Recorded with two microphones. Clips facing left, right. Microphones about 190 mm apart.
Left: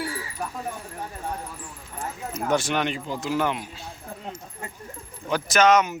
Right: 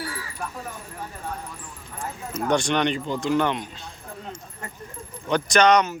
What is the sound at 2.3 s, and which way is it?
Speech, 5° left (ahead or behind).